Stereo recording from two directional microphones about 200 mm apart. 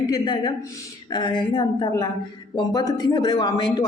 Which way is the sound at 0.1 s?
20° left (ahead or behind).